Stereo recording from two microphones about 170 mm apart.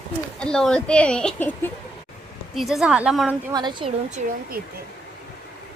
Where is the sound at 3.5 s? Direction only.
25° right (ahead or behind).